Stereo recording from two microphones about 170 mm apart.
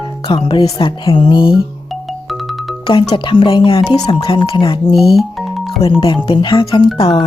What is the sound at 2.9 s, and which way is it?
Speech, 30° left (ahead or behind).